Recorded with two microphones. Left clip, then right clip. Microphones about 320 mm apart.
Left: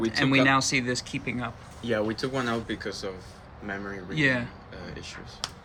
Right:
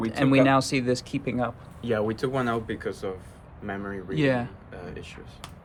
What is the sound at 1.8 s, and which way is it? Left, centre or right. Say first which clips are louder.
Speech: right 1 dB; right.